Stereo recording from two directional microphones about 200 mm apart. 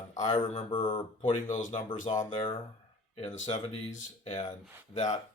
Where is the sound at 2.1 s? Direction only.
25° left (ahead or behind).